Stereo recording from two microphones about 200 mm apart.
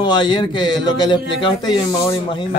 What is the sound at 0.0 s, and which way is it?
A man's voice, 25° left (ahead or behind).